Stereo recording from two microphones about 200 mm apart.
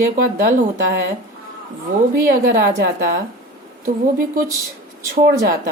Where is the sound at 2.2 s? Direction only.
45° right (ahead or behind).